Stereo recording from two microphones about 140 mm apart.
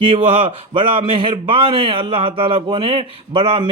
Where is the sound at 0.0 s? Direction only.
40° right (ahead or behind).